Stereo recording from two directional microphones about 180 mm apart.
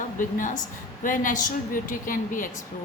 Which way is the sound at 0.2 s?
45° left (ahead or behind).